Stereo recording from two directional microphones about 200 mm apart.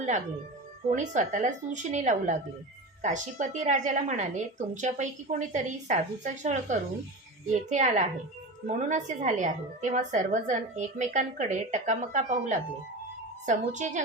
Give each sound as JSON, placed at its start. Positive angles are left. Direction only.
{"t": 0.9, "sound": "a woman's voice", "side_deg": -35}